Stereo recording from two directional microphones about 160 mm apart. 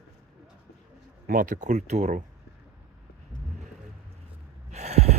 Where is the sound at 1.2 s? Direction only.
55° right (ahead or behind).